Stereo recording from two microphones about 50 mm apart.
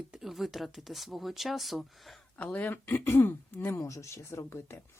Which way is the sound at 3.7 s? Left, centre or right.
Left.